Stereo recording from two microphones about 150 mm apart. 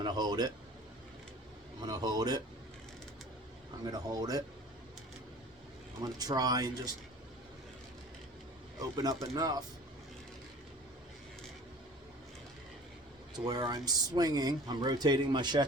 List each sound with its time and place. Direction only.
0.0 s speech: 25° right (ahead or behind)
1.8 s speech: 30° right (ahead or behind)
3.8 s speech: 25° right (ahead or behind)
6.0 s speech: 25° right (ahead or behind)
8.8 s speech: 25° right (ahead or behind)
13.3 s speech: 25° right (ahead or behind)